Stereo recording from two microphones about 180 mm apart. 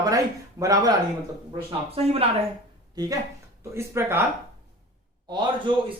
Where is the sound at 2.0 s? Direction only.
35° right (ahead or behind).